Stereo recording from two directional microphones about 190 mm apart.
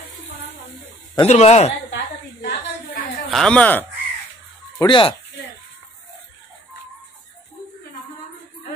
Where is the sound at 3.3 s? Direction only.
5° left (ahead or behind).